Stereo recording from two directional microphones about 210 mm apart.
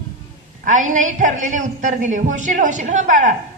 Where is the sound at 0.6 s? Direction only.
35° right (ahead or behind).